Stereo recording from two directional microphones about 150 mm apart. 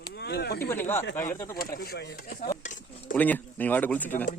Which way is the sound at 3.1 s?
10° left (ahead or behind).